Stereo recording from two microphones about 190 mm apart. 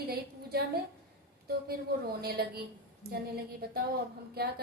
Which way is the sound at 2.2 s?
55° right (ahead or behind).